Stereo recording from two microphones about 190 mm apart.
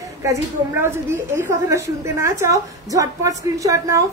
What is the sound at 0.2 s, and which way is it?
A woman's voice, 15° right (ahead or behind).